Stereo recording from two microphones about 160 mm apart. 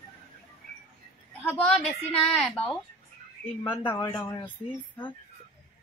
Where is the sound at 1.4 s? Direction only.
5° left (ahead or behind).